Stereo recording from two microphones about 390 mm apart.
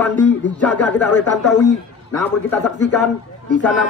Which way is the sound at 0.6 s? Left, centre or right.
Centre.